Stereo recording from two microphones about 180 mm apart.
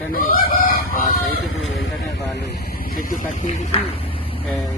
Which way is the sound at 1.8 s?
75° left (ahead or behind).